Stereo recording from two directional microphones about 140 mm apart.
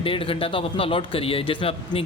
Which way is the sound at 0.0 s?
40° left (ahead or behind).